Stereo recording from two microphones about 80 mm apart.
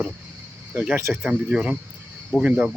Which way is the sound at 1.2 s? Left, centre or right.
Centre.